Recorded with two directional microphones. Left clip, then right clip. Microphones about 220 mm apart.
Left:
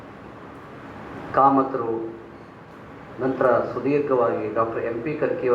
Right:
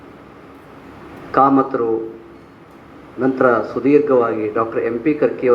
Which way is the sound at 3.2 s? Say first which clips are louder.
Right 5 dB; 50° right (ahead or behind).